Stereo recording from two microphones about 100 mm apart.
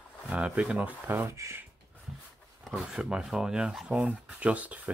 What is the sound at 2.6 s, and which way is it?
Speech, centre (ahead or behind).